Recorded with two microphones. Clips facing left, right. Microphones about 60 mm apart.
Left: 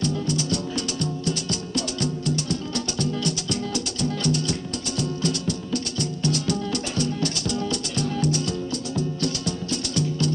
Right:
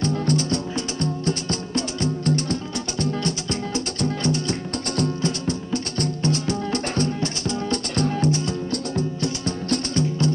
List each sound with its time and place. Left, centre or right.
0.0 s music: right